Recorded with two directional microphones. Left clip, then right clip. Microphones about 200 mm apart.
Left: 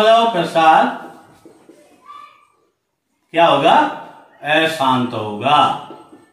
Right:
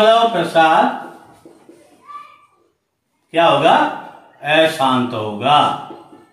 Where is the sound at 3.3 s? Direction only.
15° right (ahead or behind).